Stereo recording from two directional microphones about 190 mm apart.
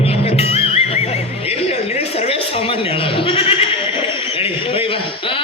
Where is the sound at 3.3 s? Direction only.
30° left (ahead or behind).